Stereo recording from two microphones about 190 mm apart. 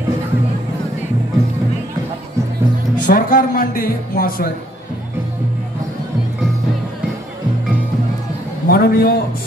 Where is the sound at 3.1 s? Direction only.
45° left (ahead or behind).